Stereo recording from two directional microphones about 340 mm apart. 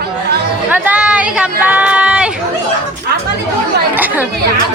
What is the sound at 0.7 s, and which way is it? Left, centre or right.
Speech, centre.